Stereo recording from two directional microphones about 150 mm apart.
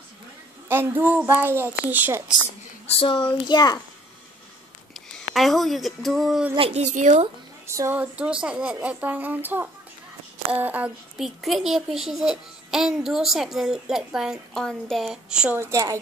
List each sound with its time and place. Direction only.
0.7 s a woman's voice: 15° right (ahead or behind)
2.9 s speech: 35° left (ahead or behind)
5.1 s speech: centre (ahead or behind)
6.5 s speech: 40° right (ahead or behind)
7.6 s a woman's voice: 20° right (ahead or behind)
15.6 s a woman's voice: 20° right (ahead or behind)